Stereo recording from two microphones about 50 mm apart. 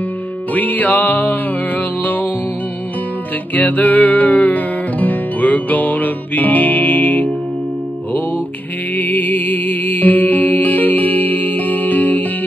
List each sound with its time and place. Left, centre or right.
0.6 s music: left
3.5 s music: left
8.9 s music: left